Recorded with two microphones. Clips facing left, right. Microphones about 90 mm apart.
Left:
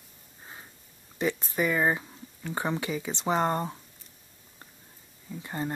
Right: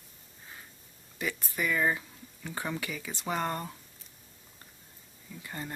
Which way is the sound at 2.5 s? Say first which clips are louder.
Left 6 dB; 30° left (ahead or behind).